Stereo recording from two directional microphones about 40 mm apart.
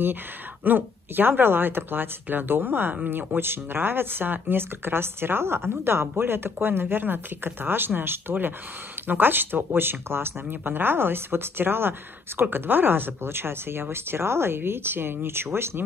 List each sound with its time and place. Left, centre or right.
0.7 s speech: right